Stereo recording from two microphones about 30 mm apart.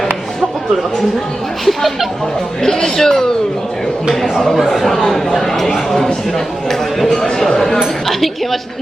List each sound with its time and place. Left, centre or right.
1.6 s speech: centre
2.6 s speech: centre
4.5 s speech: centre